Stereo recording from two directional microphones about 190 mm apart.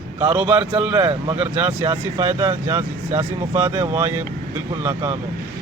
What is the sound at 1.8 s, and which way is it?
A man's voice, 20° right (ahead or behind).